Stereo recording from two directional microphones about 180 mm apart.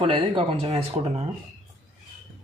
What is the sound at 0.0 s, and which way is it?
Speech, 30° right (ahead or behind).